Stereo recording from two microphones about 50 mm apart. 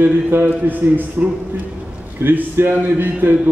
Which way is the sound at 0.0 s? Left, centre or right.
Right.